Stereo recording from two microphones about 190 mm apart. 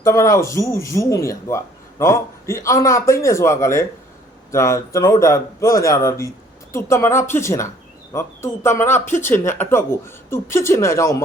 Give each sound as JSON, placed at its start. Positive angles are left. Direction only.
{"t": 0.0, "sound": "speech", "side_deg": 15}